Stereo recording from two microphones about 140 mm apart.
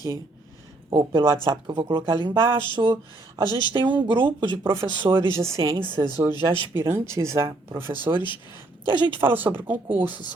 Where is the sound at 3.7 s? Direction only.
35° right (ahead or behind).